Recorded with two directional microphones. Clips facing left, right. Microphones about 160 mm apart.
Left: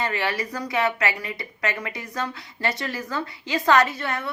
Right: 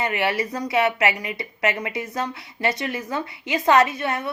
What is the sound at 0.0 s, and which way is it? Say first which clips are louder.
A woman's voice: right 3 dB; 20° right (ahead or behind).